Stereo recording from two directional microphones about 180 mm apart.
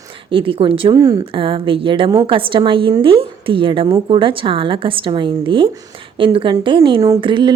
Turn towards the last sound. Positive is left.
turn(degrees=-25)  # may be behind; listen again after turning